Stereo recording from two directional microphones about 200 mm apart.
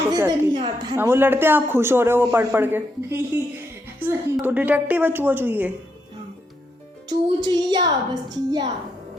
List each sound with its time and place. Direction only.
0.1 s a woman's voice: 20° right (ahead or behind)
7.1 s a woman's voice: 20° right (ahead or behind)